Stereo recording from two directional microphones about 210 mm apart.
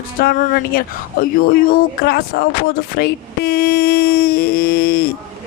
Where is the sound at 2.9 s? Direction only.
50° left (ahead or behind).